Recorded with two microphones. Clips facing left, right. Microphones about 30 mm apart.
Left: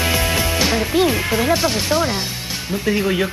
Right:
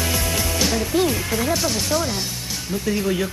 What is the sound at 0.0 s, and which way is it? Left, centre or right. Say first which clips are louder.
Speech: left 5 dB; left.